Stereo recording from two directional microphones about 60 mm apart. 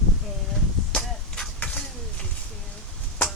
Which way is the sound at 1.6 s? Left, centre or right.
Left.